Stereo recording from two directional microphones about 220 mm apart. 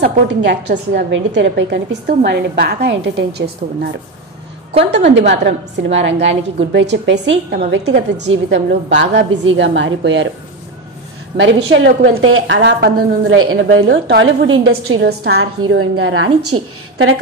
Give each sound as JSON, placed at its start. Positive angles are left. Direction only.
{"t": 0.0, "sound": "a woman's voice", "side_deg": -50}
{"t": 5.3, "sound": "a woman's voice", "side_deg": -55}
{"t": 11.3, "sound": "a woman's voice", "side_deg": -55}
{"t": 13.5, "sound": "a woman's voice", "side_deg": -65}
{"t": 15.8, "sound": "a woman's voice", "side_deg": -70}